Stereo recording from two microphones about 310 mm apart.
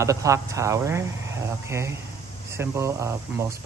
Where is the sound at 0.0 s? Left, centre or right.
Centre.